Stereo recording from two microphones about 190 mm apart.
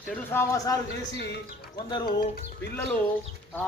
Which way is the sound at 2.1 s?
50° left (ahead or behind).